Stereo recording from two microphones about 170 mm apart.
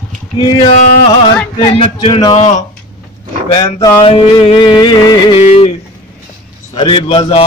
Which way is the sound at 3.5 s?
30° left (ahead or behind).